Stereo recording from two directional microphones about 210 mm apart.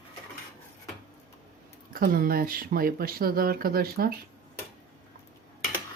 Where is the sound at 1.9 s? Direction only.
45° right (ahead or behind).